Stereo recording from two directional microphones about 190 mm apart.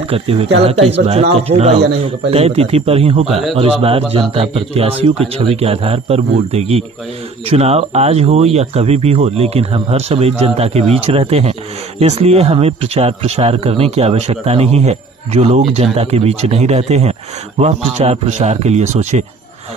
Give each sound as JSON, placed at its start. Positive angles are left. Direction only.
{"t": 0.1, "sound": "speech", "side_deg": -30}